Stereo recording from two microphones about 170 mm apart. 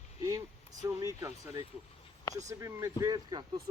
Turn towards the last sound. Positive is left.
turn(degrees=-25)  # may be behind; listen again after turning